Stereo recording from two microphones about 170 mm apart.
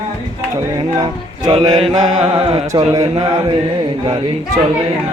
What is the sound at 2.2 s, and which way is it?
Music, 35° right (ahead or behind).